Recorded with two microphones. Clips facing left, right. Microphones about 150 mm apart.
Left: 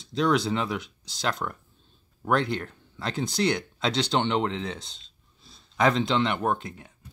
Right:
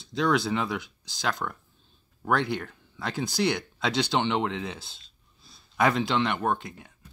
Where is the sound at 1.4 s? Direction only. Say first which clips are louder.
Left 1 dB; 5° left (ahead or behind).